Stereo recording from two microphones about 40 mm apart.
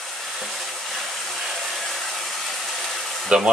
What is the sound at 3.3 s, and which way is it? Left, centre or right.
Speech, right.